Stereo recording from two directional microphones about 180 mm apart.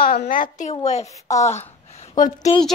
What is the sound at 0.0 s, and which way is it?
A woman's voice, 50° left (ahead or behind).